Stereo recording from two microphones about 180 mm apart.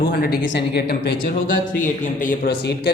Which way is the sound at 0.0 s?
60° left (ahead or behind).